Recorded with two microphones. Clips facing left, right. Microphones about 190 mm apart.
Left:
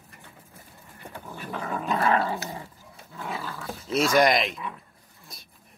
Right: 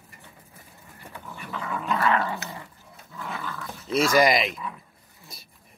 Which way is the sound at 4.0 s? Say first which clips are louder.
Right 1 dB; centre (ahead or behind).